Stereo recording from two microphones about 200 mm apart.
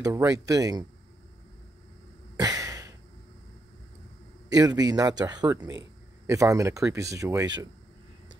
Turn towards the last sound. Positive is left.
turn(degrees=-20)  # may be behind; listen again after turning